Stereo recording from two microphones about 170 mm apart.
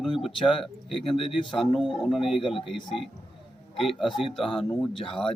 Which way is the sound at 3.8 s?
Centre (ahead or behind).